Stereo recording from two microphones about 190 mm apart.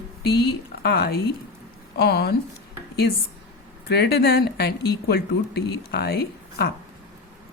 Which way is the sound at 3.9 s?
60° left (ahead or behind).